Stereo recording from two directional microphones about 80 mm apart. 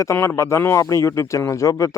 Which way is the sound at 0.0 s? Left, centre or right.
Left.